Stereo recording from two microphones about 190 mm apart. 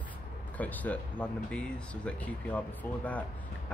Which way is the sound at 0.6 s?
10° left (ahead or behind).